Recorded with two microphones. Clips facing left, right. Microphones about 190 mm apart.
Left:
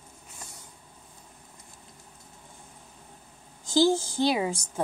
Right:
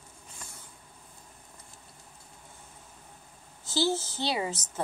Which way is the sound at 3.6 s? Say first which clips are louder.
Left 6 dB; 15° left (ahead or behind).